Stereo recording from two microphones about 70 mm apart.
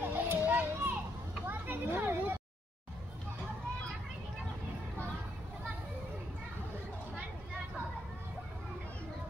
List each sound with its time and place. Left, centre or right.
0.0 s children playing: right